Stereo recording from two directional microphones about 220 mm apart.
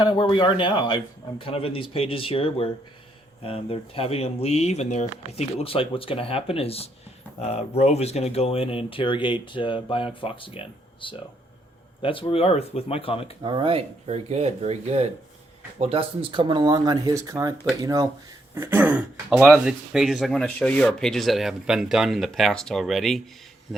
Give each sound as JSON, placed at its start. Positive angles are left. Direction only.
{"t": 0.0, "sound": "speech", "side_deg": 20}
{"t": 13.4, "sound": "speech", "side_deg": -20}